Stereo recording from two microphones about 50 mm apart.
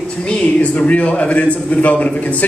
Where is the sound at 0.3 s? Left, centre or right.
Left.